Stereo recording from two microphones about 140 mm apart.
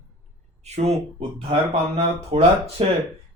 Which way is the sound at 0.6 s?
50° right (ahead or behind).